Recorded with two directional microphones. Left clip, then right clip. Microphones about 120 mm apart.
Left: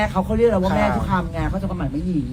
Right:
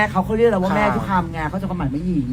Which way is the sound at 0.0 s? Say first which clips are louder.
Right 2 dB; 30° right (ahead or behind).